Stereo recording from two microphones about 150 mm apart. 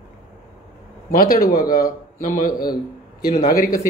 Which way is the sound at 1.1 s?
70° left (ahead or behind).